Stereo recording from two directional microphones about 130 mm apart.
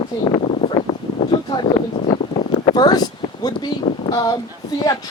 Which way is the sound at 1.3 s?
35° left (ahead or behind).